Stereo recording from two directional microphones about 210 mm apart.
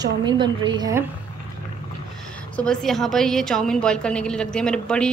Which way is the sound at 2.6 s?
5° left (ahead or behind).